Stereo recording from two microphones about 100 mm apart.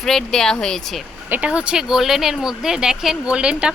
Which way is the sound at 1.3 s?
10° right (ahead or behind).